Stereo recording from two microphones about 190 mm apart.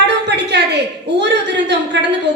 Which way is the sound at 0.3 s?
65° right (ahead or behind).